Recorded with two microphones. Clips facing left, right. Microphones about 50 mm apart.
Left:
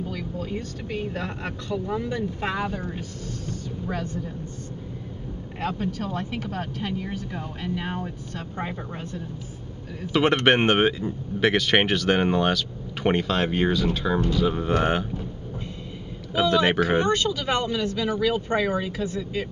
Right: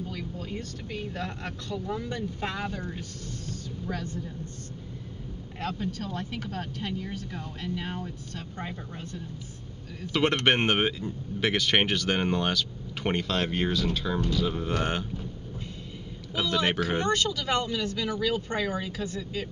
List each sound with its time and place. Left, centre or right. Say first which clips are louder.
0.1 s vehicle: left 5 dB; centre
0.5 s speech: left 5 dB; centre
5.6 s speech: left 4 dB; centre
10.0 s speech: left 4 dB; centre
16.3 s speech: left 6 dB; centre